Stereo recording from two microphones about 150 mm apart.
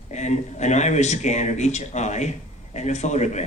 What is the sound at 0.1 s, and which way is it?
A man's voice, 50° left (ahead or behind).